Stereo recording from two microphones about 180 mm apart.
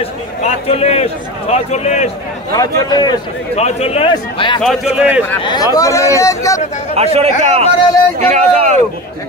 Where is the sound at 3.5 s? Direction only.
35° left (ahead or behind).